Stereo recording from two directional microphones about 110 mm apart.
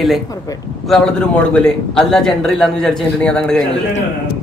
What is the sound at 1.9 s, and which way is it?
Speech, 5° left (ahead or behind).